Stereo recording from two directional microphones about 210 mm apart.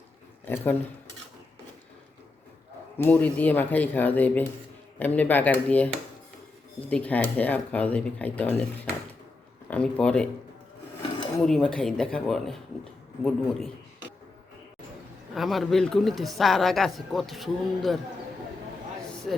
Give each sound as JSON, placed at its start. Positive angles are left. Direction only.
{"t": 0.4, "sound": "speech", "side_deg": 10}
{"t": 3.0, "sound": "a man's voice", "side_deg": 5}
{"t": 11.3, "sound": "a man's voice", "side_deg": 5}
{"t": 15.4, "sound": "a man's voice", "side_deg": 0}